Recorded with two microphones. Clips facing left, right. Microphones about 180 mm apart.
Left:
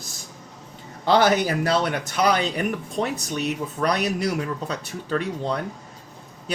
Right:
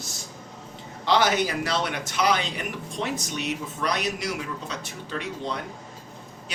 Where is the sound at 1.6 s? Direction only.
45° left (ahead or behind).